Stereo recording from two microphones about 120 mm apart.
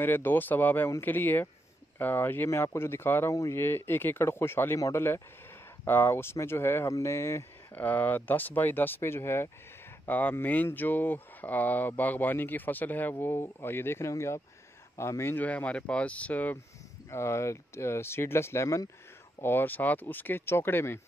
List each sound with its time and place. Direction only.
0.0 s speech: 15° left (ahead or behind)
17.1 s speech: 25° left (ahead or behind)